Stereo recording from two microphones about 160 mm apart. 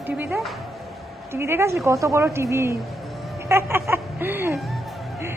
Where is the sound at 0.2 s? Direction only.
10° right (ahead or behind).